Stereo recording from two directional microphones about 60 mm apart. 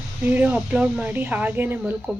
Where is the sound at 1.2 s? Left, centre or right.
Right.